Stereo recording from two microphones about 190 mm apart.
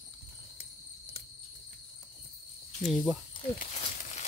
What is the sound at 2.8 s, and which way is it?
Speech, centre (ahead or behind).